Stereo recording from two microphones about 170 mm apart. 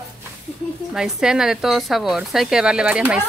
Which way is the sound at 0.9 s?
5° right (ahead or behind).